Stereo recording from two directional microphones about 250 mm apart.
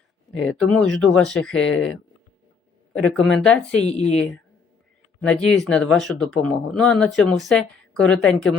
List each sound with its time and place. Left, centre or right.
0.4 s speech: centre
3.0 s speech: centre
3.8 s speech: left
5.2 s speech: centre